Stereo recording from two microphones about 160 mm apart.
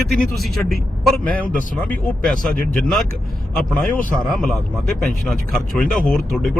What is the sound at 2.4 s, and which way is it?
Speech, 55° left (ahead or behind).